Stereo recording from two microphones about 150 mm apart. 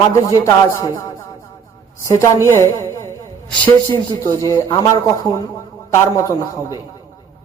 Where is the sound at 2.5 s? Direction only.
20° left (ahead or behind).